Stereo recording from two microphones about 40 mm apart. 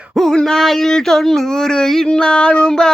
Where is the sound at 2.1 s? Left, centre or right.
Left.